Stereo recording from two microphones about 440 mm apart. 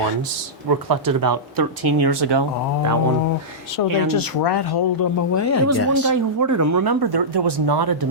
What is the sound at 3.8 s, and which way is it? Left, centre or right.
Speech, left.